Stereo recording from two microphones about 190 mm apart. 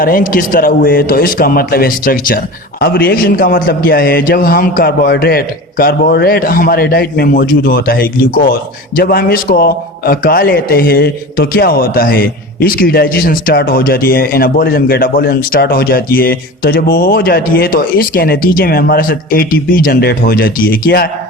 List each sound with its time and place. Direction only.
0.0 s a man's voice: 50° left (ahead or behind)